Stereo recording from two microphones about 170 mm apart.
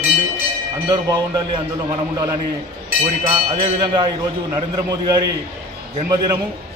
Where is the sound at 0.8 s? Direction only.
25° right (ahead or behind).